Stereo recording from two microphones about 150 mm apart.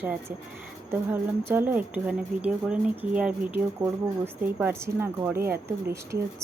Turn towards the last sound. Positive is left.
turn(degrees=-15)  # may be behind; listen again after turning